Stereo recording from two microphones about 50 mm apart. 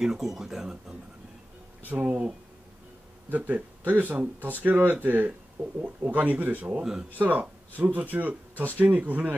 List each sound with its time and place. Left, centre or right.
0.0 s speech: centre
1.9 s speech: right
6.8 s speech: centre
7.2 s speech: right